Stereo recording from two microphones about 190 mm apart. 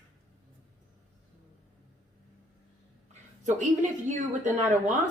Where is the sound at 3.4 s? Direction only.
40° right (ahead or behind).